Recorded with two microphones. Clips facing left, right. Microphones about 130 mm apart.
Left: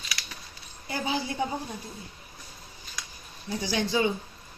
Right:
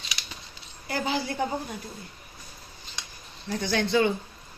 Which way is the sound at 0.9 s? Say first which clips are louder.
Right 2 dB; 65° right (ahead or behind).